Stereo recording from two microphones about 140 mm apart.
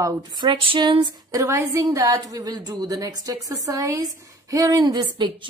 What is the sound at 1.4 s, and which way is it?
A woman's voice, 20° right (ahead or behind).